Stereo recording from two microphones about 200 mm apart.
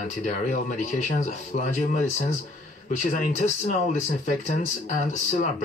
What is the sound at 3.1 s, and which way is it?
Speech, 40° left (ahead or behind).